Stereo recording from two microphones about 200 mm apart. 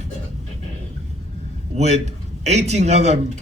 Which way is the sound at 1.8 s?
35° right (ahead or behind).